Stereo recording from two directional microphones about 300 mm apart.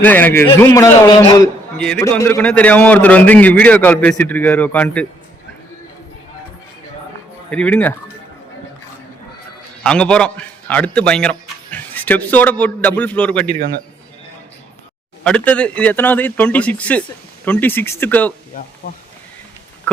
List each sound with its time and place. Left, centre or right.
0.0 s a man's voice: centre
7.5 s a man's voice: centre
9.8 s a man's voice: centre
15.2 s a man's voice: centre
18.5 s speech: left